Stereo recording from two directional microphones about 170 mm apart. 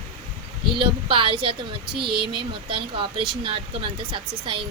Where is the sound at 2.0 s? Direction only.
70° right (ahead or behind).